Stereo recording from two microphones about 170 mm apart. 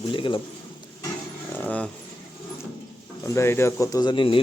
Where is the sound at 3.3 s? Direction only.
15° left (ahead or behind).